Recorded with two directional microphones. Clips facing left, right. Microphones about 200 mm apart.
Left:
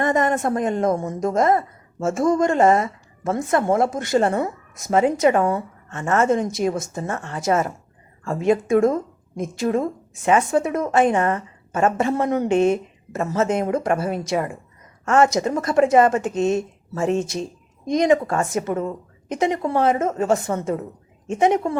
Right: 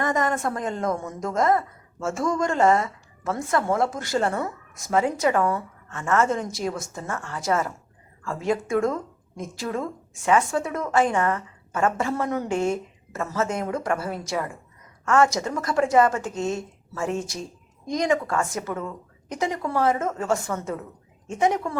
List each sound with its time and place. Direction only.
0.0 s a woman's voice: 25° left (ahead or behind)